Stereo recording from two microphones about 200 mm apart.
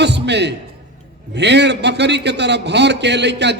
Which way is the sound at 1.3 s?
60° right (ahead or behind).